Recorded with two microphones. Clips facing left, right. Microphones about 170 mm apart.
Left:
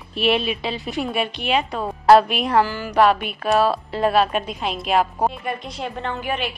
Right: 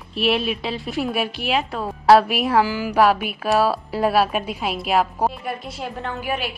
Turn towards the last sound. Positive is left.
turn(degrees=-5)  # may be behind; listen again after turning